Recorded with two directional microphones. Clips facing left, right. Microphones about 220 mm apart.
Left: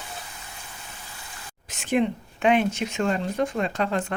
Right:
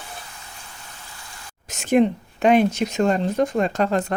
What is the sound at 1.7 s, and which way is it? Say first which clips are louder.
Speech: right 6 dB; 45° right (ahead or behind).